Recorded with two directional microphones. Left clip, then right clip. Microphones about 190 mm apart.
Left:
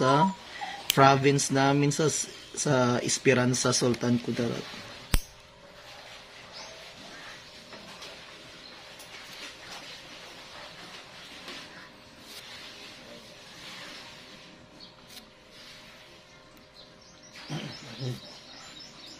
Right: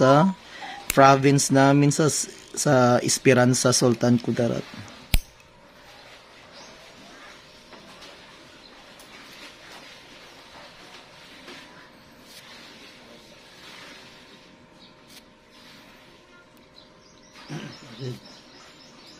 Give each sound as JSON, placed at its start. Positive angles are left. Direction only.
{"t": 0.0, "sound": "speech", "side_deg": -60}